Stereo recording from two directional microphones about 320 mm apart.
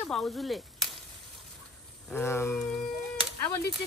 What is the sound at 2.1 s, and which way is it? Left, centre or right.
Speech, centre.